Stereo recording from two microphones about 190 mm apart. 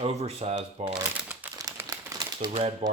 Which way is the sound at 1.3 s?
15° right (ahead or behind).